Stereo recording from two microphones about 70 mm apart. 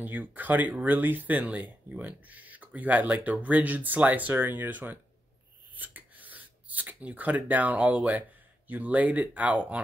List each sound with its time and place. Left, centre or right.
0.0 s speech: right